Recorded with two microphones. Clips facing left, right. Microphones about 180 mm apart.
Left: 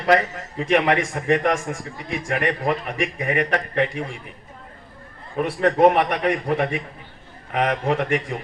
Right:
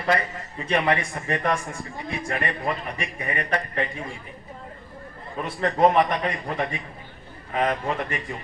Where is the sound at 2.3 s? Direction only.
75° left (ahead or behind).